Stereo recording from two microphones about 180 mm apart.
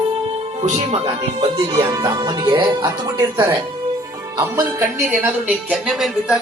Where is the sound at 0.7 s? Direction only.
35° right (ahead or behind).